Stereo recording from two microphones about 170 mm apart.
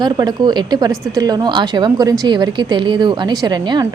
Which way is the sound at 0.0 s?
25° right (ahead or behind).